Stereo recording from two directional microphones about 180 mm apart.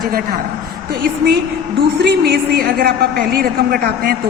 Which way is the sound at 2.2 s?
60° right (ahead or behind).